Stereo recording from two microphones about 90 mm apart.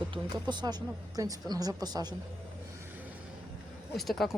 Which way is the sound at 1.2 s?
45° right (ahead or behind).